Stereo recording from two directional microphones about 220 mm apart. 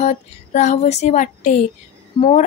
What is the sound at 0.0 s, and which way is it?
A woman's voice, 30° left (ahead or behind).